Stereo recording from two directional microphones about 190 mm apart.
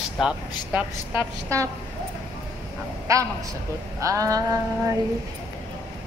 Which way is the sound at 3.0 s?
15° right (ahead or behind).